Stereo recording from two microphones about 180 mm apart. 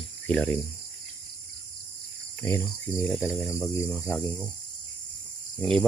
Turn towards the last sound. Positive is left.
turn(degrees=5)  # may be behind; listen again after turning